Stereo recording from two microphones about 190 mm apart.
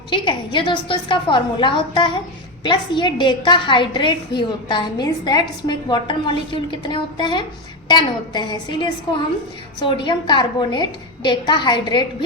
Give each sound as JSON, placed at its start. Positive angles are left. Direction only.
{"t": 0.1, "sound": "a woman's voice", "side_deg": 25}